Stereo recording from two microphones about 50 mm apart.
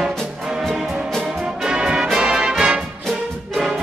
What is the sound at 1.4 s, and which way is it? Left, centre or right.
Brass instrument, centre.